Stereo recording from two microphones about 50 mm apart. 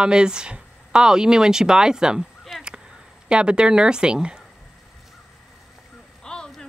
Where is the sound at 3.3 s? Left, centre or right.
Centre.